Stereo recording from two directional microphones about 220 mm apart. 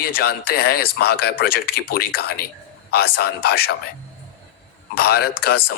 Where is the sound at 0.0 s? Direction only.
45° left (ahead or behind).